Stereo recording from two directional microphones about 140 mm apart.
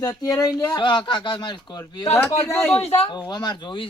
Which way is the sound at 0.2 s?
25° left (ahead or behind).